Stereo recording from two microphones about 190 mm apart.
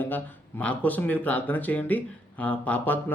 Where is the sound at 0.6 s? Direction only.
10° left (ahead or behind).